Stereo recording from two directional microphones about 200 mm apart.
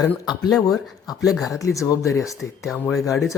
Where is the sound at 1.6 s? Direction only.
15° left (ahead or behind).